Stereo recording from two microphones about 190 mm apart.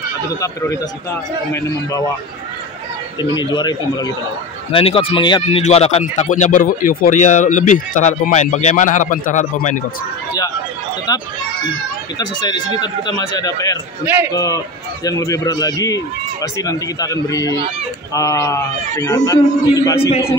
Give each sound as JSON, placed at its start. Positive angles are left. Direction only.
{"t": 0.4, "sound": "a man's voice", "side_deg": 15}
{"t": 3.2, "sound": "a man's voice", "side_deg": 25}
{"t": 11.1, "sound": "a man's voice", "side_deg": 20}